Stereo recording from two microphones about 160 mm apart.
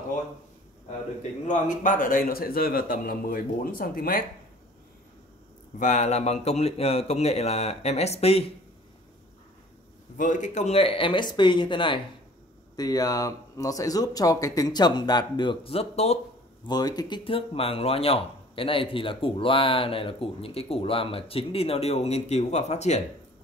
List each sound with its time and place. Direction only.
1.5 s a man's voice: 55° left (ahead or behind)
5.8 s speech: 50° left (ahead or behind)
10.1 s speech: 50° left (ahead or behind)
16.6 s speech: 25° left (ahead or behind); by 23.0 s 45° left (ahead or behind)